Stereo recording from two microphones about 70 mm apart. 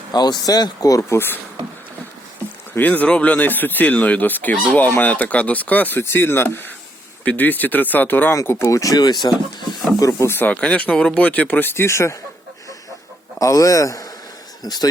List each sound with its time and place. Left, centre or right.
0.1 s speech: left
2.7 s speech: left
6.0 s speech: left
8.6 s speech: left
10.0 s a man's voice: left
10.2 s speech: left
10.5 s speech: centre
11.7 s speech: left
13.4 s a man's voice: left
14.6 s speech: left